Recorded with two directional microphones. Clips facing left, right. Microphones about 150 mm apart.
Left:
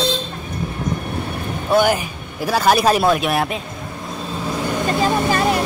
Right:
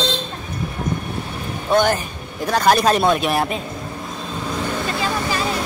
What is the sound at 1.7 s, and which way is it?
Speech, 5° left (ahead or behind).